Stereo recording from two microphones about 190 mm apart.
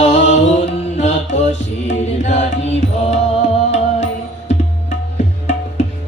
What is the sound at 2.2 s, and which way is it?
Music, 35° left (ahead or behind).